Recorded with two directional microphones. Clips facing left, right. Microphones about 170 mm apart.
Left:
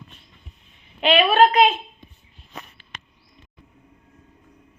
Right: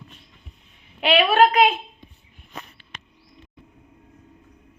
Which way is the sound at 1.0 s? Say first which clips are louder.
Left 1 dB; 10° right (ahead or behind).